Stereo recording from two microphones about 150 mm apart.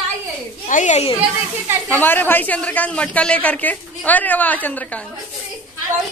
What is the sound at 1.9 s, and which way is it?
A man's voice, 10° left (ahead or behind).